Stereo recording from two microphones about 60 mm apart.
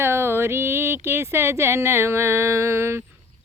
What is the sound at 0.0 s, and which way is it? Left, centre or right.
Speech, right.